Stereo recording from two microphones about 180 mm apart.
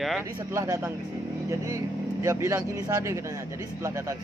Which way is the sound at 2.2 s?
15° right (ahead or behind).